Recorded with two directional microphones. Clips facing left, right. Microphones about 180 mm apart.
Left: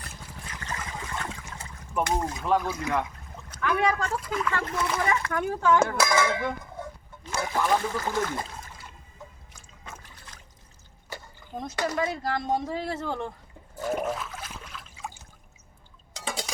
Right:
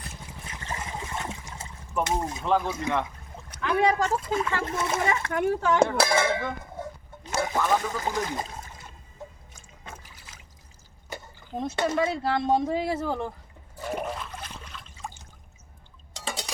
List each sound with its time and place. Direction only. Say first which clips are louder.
0.3 s trickle: right 1 dB; 25° right (ahead or behind)
2.0 s speech: even; 25° right (ahead or behind)
9.5 s boat: right 1 dB; 30° right (ahead or behind)
11.1 s speech: right 2 dB; 25° right (ahead or behind); by 13.3 s 10° right (ahead or behind)
13.7 s trickle: left 3 dB; centre (ahead or behind)
16.1 s a sound: left 1 dB; centre (ahead or behind)